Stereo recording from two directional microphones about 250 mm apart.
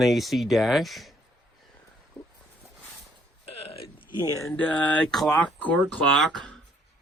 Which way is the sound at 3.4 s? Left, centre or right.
Left.